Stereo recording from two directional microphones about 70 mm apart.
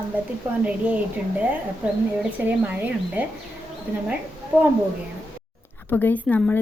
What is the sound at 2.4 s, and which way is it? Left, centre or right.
Speech, right.